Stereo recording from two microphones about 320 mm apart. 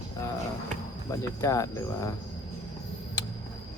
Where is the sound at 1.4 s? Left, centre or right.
Centre.